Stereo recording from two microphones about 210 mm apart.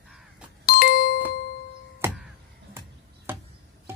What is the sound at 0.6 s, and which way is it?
Doorbell, 45° left (ahead or behind).